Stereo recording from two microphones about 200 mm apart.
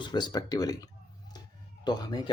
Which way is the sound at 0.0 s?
20° left (ahead or behind).